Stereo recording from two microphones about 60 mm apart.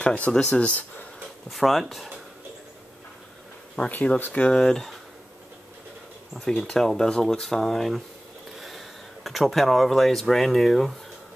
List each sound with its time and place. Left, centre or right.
0.0 s speech: left
1.5 s speech: centre
3.9 s speech: left; by 4.9 s centre
6.7 s speech: centre